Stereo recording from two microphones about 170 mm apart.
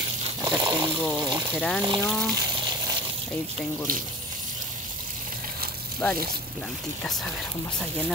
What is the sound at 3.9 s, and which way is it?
Speech, 55° right (ahead or behind).